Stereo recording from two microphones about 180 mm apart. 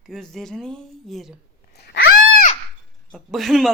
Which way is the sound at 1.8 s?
85° left.